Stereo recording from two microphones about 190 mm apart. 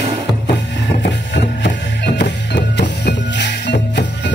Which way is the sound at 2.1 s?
65° left (ahead or behind).